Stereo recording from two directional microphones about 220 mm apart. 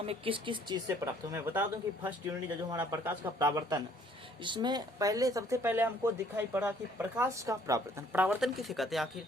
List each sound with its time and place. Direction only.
0.0 s speech: 25° right (ahead or behind); by 9.2 s centre (ahead or behind)